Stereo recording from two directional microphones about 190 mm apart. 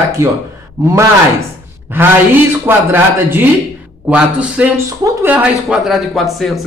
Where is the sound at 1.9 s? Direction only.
10° right (ahead or behind).